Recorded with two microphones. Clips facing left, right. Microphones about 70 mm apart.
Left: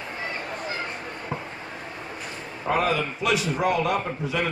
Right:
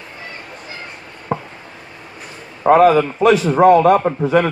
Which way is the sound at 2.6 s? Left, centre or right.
Right.